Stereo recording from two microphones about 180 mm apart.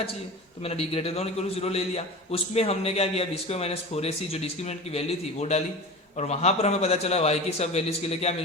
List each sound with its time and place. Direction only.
0.6 s a man's voice: 35° left (ahead or behind)